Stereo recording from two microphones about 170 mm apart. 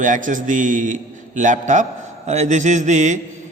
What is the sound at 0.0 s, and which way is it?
A man's voice, 50° right (ahead or behind).